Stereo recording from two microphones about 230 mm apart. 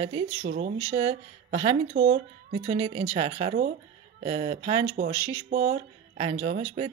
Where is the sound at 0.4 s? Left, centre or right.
Right.